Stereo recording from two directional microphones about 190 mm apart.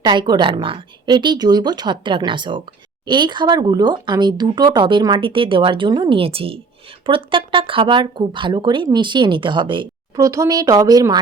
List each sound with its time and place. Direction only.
0.0 s speech: 25° right (ahead or behind)